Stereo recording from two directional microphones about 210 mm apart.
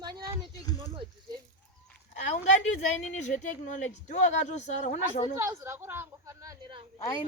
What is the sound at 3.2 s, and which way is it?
Speech, 35° left (ahead or behind).